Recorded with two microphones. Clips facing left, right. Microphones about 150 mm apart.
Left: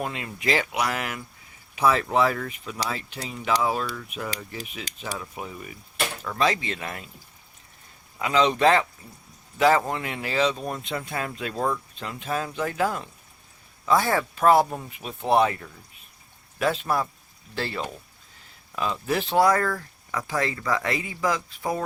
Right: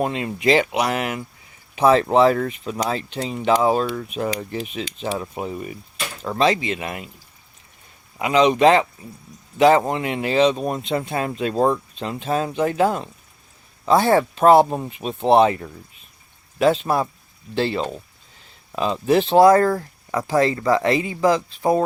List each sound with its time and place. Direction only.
0.0 s speech: 25° right (ahead or behind)
8.2 s speech: 15° right (ahead or behind)